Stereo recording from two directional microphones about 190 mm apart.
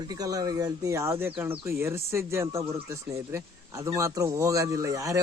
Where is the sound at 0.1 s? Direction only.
20° right (ahead or behind).